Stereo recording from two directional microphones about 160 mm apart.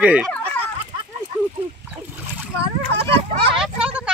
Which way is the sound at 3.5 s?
5° right (ahead or behind).